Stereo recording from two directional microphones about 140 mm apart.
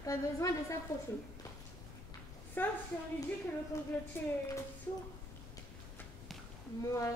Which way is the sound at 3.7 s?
25° left (ahead or behind).